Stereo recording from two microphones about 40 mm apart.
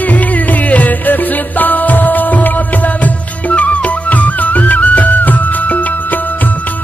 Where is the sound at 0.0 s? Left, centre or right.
Left.